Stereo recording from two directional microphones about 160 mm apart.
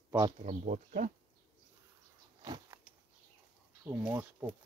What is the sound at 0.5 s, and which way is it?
Speech, 55° right (ahead or behind).